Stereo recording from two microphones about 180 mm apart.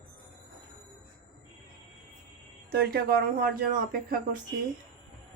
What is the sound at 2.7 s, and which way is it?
Speech, 60° right (ahead or behind).